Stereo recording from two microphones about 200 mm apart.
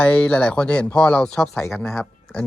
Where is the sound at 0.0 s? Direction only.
5° left (ahead or behind).